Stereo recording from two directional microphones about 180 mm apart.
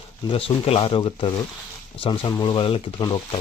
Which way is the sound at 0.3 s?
30° left (ahead or behind).